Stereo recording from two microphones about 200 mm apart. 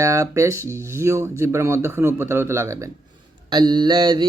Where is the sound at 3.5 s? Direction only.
20° right (ahead or behind).